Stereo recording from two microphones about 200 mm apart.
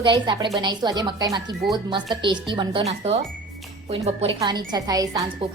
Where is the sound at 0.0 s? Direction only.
25° right (ahead or behind).